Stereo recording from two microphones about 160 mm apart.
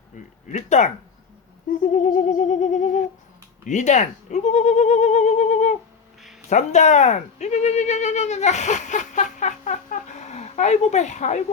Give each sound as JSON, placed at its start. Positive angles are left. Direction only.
{"t": 0.4, "sound": "speech", "side_deg": 50}
{"t": 1.9, "sound": "speech", "side_deg": 50}